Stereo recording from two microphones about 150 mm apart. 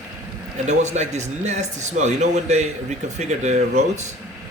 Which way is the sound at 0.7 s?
50° right (ahead or behind).